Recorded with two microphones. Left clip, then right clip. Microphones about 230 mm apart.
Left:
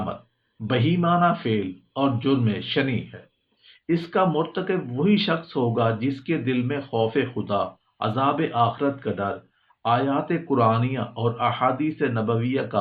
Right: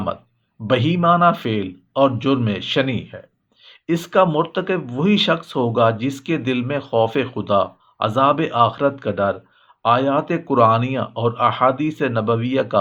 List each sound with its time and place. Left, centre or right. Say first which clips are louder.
0.7 s speech: right 6 dB; right